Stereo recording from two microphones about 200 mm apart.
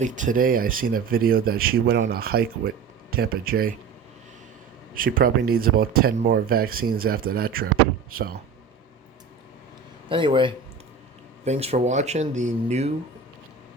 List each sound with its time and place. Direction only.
0.0 s speech: 40° right (ahead or behind)
4.9 s speech: 45° right (ahead or behind)
10.1 s a man's voice: 25° right (ahead or behind)